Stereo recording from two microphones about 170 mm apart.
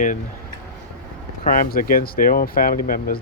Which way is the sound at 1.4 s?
55° left (ahead or behind).